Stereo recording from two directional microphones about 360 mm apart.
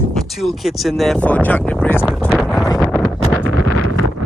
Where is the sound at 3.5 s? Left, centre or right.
Right.